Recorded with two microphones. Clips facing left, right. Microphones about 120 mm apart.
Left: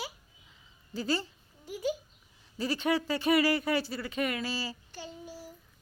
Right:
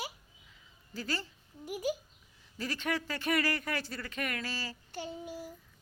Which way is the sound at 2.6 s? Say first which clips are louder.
Left 6 dB; 15° left (ahead or behind).